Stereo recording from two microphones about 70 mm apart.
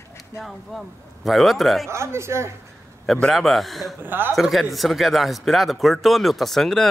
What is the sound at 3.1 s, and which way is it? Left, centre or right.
Speech, centre.